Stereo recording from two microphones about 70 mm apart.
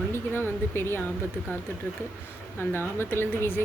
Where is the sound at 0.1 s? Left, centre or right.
Left.